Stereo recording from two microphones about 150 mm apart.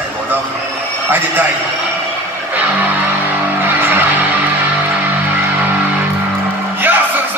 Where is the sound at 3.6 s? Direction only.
15° right (ahead or behind).